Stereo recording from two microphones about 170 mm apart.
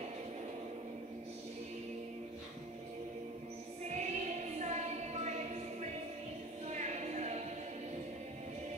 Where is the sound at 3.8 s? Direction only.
40° right (ahead or behind).